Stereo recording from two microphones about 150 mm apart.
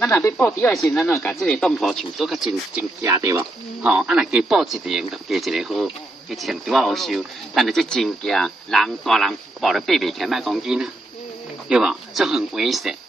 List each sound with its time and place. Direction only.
0.0 s speech: 15° left (ahead or behind)
3.0 s speech: 20° right (ahead or behind)
3.8 s speech: 5° right (ahead or behind)